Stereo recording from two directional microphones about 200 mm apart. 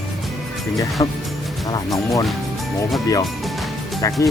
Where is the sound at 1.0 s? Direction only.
15° left (ahead or behind).